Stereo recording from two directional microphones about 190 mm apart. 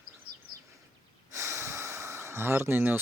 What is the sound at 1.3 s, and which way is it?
Snort, 15° right (ahead or behind).